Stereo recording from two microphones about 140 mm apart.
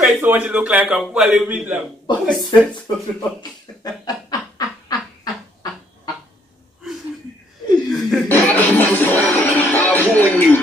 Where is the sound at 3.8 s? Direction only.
30° left (ahead or behind).